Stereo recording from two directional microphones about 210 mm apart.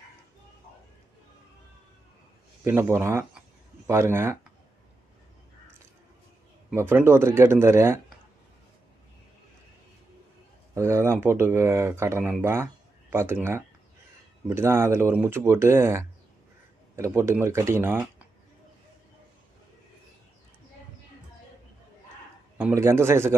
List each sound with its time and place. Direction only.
2.6 s speech: 10° right (ahead or behind)
6.7 s speech: 10° right (ahead or behind)
10.7 s speech: 15° right (ahead or behind)
22.6 s speech: 10° right (ahead or behind)